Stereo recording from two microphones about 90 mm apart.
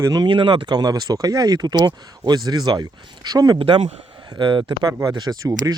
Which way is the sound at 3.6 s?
90° right.